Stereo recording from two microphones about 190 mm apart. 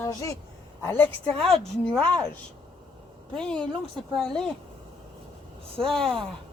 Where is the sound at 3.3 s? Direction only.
5° left (ahead or behind).